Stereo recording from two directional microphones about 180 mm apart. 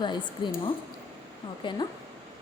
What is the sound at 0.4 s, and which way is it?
Speech, 25° left (ahead or behind).